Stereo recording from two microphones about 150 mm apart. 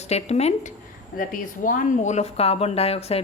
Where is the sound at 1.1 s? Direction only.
65° left (ahead or behind).